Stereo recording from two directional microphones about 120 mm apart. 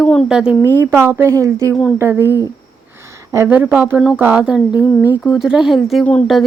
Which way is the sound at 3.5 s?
10° right (ahead or behind).